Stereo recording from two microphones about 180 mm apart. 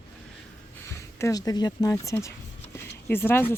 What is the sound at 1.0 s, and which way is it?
Speech, 15° left (ahead or behind).